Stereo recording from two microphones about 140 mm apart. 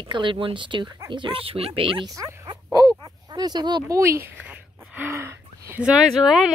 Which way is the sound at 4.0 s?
15° right (ahead or behind).